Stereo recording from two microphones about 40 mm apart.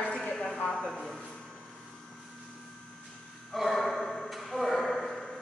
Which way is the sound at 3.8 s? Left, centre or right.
Centre.